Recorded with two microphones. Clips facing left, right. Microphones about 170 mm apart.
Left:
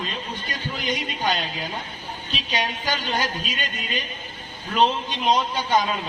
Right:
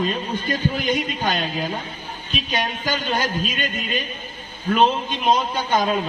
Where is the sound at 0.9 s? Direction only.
50° right (ahead or behind).